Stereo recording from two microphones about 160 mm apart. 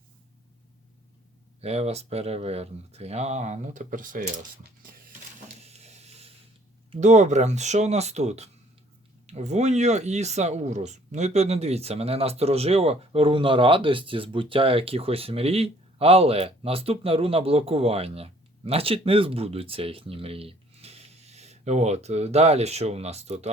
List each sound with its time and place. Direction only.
1.6 s speech: 40° right (ahead or behind)
5.6 s a sound: 40° right (ahead or behind)
7.0 s speech: 45° right (ahead or behind)